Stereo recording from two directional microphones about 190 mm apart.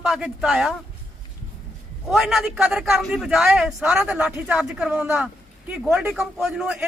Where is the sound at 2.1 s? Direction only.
5° right (ahead or behind).